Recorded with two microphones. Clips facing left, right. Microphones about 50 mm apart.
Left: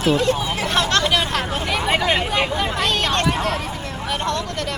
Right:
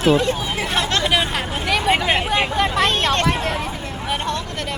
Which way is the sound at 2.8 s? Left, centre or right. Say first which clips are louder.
Right 2 dB; right.